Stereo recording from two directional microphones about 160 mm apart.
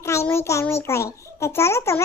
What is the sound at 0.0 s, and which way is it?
A child's voice, 15° left (ahead or behind).